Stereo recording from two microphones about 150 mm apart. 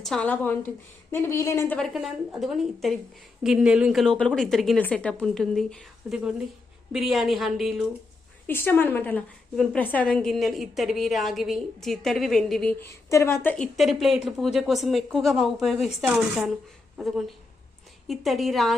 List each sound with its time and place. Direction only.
0.0 s a woman's voice: 5° left (ahead or behind)
1.8 s a woman's voice: centre (ahead or behind)
8.4 s a woman's voice: 15° left (ahead or behind)
12.8 s a woman's voice: 20° left (ahead or behind)
13.7 s a woman's voice: centre (ahead or behind)